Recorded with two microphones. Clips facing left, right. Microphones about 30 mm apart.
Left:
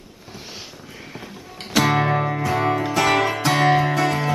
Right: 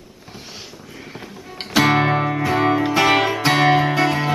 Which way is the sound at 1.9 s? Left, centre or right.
Right.